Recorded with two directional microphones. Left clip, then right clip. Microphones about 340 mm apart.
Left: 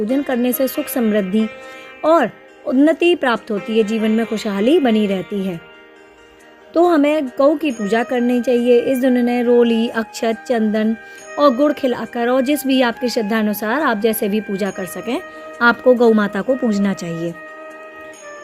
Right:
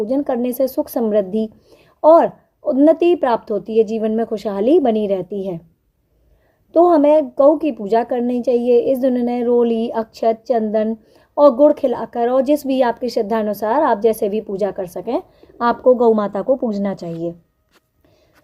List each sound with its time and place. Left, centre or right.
0.1 s speech: centre
2.7 s speech: centre
6.9 s speech: left